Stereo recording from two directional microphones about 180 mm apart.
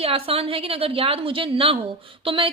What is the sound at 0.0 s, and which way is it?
A woman's voice, 35° right (ahead or behind).